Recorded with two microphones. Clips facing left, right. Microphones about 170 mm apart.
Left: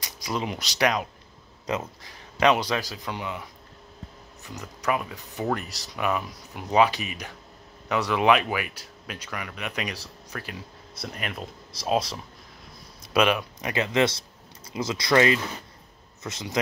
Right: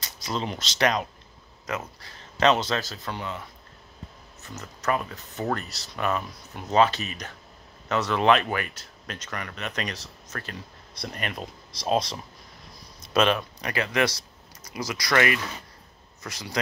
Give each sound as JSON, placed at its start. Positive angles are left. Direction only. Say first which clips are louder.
{"t": 0.0, "sound": "speech", "louder": "left 1 dB", "side_deg": 15}